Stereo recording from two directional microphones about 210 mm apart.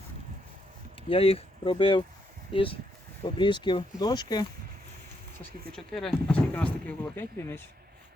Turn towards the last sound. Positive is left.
turn(degrees=10)  # may be behind; listen again after turning